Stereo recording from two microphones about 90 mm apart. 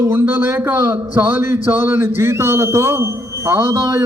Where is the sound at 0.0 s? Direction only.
25° right (ahead or behind).